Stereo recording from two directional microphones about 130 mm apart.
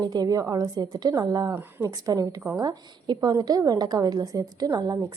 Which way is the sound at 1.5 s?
20° right (ahead or behind).